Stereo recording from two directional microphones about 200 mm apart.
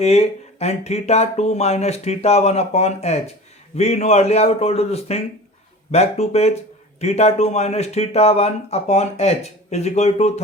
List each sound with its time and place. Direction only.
0.0 s speech: 30° left (ahead or behind)